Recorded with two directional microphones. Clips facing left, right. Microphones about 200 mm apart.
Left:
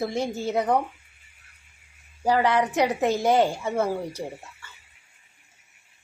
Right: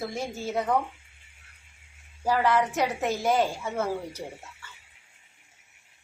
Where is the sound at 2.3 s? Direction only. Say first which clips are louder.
Left 2 dB; 15° left (ahead or behind).